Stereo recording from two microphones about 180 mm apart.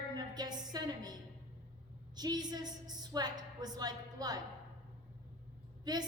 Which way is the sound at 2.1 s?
20° right (ahead or behind).